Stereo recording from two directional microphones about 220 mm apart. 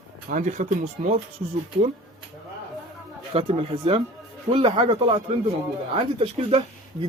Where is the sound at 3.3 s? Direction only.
25° right (ahead or behind).